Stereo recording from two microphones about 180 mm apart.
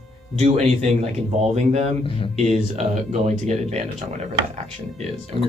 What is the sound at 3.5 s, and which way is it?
Speech, 40° right (ahead or behind).